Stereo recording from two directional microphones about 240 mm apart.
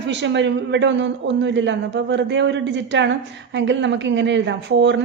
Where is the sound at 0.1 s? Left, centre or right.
Right.